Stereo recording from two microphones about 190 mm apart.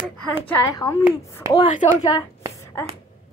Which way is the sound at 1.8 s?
35° left (ahead or behind).